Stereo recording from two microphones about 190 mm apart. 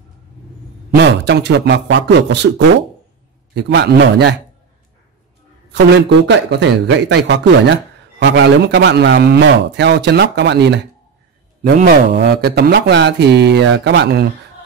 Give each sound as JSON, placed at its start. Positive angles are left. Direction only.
{"t": 0.9, "sound": "a man's voice", "side_deg": -65}
{"t": 5.7, "sound": "a man's voice", "side_deg": -65}
{"t": 11.6, "sound": "a man's voice", "side_deg": -50}